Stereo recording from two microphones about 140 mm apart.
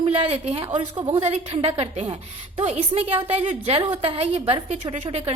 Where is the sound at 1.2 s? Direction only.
50° right (ahead or behind).